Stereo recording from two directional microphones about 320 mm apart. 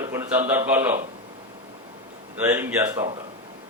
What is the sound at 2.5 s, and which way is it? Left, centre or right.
Speech, centre.